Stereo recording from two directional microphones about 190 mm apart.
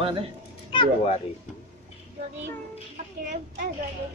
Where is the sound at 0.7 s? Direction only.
35° left (ahead or behind).